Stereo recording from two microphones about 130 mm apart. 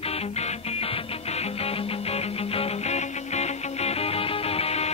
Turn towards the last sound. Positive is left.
turn(degrees=50)  # may be behind; listen again after turning